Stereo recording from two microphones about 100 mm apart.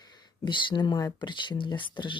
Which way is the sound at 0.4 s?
50° left (ahead or behind).